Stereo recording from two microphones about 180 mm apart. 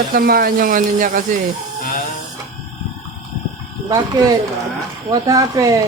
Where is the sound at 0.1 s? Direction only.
55° right (ahead or behind).